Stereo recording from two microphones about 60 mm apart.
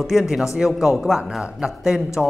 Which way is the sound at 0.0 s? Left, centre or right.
Centre.